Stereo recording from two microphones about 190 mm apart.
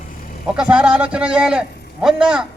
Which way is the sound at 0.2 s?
45° left (ahead or behind).